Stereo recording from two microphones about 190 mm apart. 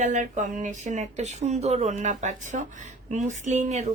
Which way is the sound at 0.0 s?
40° right (ahead or behind).